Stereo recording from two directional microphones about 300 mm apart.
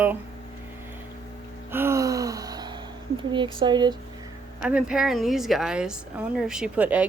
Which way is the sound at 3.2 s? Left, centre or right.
Centre.